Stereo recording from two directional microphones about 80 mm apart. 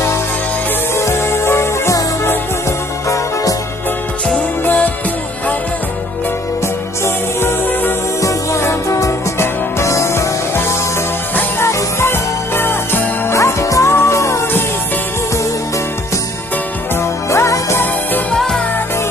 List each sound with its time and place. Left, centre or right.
0.9 s music: left
4.6 s music: centre
8.2 s music: left
11.6 s jingle bell: left
13.9 s music: left
16.9 s music: left
18.3 s music: centre